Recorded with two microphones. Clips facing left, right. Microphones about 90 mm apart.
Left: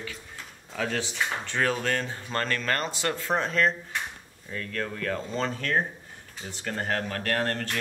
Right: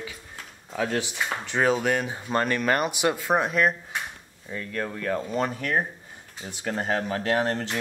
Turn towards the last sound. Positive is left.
turn(degrees=-15)  # may be behind; listen again after turning